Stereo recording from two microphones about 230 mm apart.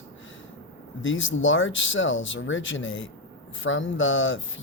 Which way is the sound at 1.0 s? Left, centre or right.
Left.